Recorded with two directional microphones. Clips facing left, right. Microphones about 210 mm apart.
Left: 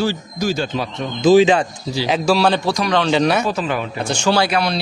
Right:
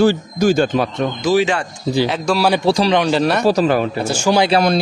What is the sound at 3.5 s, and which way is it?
Speech, 40° right (ahead or behind).